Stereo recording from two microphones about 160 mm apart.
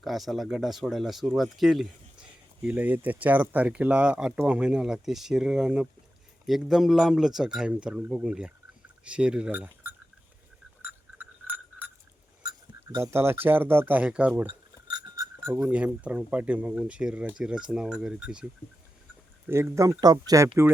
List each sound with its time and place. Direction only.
0.0 s speech: centre (ahead or behind)
10.8 s frog: 10° right (ahead or behind)
12.9 s speech: 15° right (ahead or behind)
14.4 s a sound: 30° right (ahead or behind)
15.4 s speech: 15° right (ahead or behind)
19.5 s speech: 15° right (ahead or behind)